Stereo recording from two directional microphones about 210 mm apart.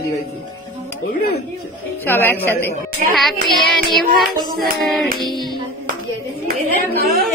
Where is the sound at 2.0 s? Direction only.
10° left (ahead or behind).